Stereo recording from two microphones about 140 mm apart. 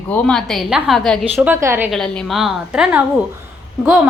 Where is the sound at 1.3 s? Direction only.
15° right (ahead or behind).